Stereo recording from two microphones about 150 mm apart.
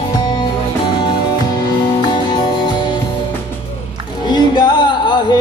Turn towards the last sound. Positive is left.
turn(degrees=30)  # may be behind; listen again after turning